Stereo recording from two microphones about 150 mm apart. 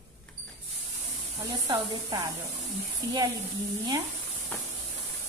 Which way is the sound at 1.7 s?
25° right (ahead or behind).